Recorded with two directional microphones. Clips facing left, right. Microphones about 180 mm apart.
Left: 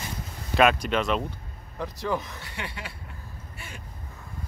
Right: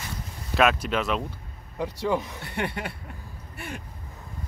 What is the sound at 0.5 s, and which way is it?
Speech, 5° right (ahead or behind).